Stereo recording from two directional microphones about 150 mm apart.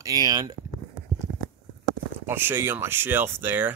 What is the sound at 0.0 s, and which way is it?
Speech, 25° right (ahead or behind).